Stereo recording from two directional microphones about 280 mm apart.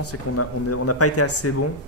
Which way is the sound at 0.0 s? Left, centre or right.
Left.